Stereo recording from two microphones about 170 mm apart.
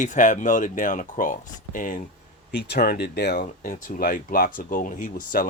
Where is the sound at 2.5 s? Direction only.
80° left.